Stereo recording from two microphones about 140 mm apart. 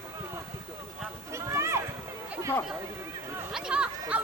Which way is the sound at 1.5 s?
20° right (ahead or behind).